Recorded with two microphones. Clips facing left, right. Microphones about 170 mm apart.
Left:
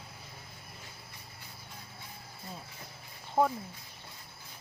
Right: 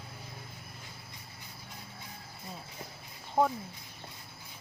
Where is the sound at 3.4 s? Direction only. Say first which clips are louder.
Even; 15° right (ahead or behind).